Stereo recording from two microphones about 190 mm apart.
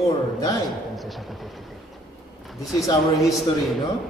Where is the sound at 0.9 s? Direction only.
Centre (ahead or behind).